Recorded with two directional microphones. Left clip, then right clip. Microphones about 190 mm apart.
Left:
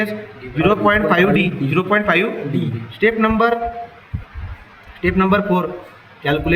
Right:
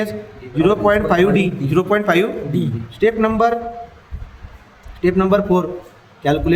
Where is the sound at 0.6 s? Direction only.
60° right (ahead or behind).